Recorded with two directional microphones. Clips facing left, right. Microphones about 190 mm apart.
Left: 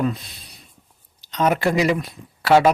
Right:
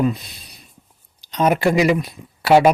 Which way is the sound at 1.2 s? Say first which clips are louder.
Right 2 dB; 15° right (ahead or behind).